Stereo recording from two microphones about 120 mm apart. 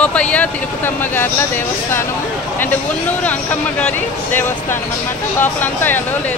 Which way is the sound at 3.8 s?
15° left (ahead or behind).